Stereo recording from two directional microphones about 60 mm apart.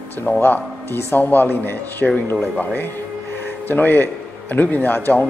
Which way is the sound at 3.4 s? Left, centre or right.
Left.